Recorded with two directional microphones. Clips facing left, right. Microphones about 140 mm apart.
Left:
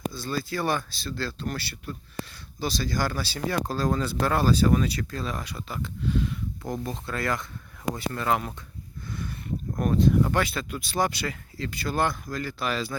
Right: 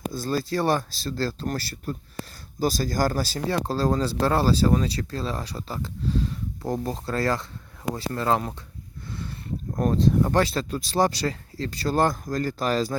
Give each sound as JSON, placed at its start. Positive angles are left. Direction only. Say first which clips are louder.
{"t": 0.1, "sound": "speech", "louder": "right 4 dB", "side_deg": -40}
{"t": 3.5, "sound": "speech", "louder": "right 3 dB", "side_deg": -30}
{"t": 9.7, "sound": "speech", "louder": "right 1 dB", "side_deg": -35}